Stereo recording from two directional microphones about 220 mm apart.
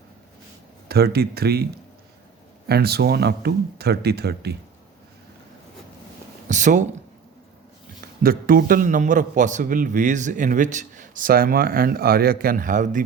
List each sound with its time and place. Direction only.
0.9 s speech: 45° right (ahead or behind)
2.6 s speech: 45° right (ahead or behind)
6.5 s a man's voice: 35° right (ahead or behind)
8.2 s a man's voice: 40° right (ahead or behind)